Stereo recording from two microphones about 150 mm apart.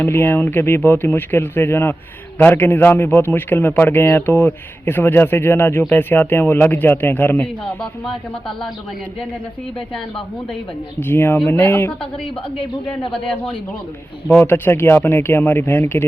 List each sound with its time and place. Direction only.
0.0 s a man's voice: 15° left (ahead or behind)
11.0 s a man's voice: 15° left (ahead or behind)
12.2 s a man's voice: 35° left (ahead or behind)
14.3 s a man's voice: 10° left (ahead or behind)